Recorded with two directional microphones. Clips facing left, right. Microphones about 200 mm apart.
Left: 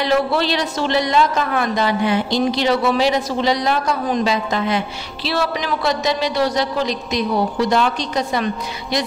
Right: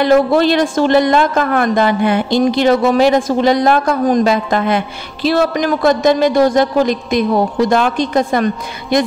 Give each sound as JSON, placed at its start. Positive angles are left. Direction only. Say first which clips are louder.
{"t": 0.0, "sound": "a woman's voice", "louder": "right 7 dB", "side_deg": -50}